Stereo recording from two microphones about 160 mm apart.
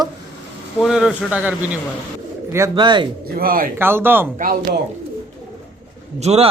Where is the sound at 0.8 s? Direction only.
5° right (ahead or behind).